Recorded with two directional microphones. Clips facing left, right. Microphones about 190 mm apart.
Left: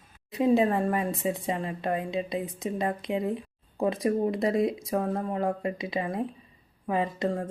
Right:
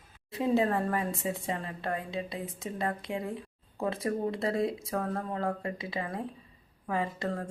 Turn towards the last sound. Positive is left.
turn(degrees=15)  # may be behind; listen again after turning